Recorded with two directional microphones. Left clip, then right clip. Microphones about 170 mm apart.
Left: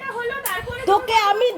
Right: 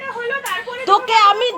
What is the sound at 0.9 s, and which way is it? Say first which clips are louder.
Speech: right 5 dB; 20° left (ahead or behind).